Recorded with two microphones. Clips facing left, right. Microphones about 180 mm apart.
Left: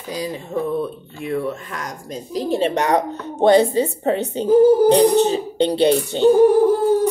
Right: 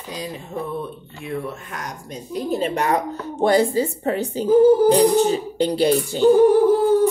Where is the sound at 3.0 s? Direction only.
25° left (ahead or behind).